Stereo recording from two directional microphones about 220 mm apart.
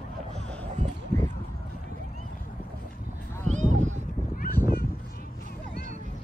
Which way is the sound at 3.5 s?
35° right (ahead or behind).